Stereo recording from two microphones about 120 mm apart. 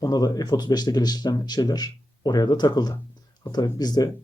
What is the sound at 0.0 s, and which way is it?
Speech, 30° left (ahead or behind).